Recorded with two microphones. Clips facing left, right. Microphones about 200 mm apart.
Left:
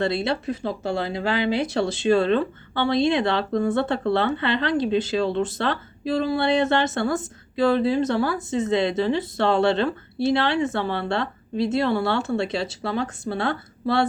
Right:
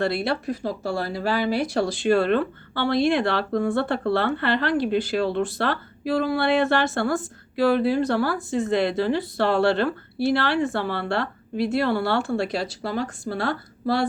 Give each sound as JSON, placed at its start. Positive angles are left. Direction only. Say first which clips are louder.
{"t": 0.0, "sound": "speech", "louder": "even", "side_deg": 20}